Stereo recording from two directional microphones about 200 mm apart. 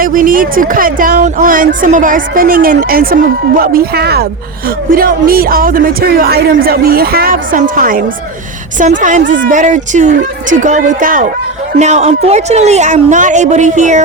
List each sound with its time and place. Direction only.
0.0 s a woman's voice: 45° right (ahead or behind)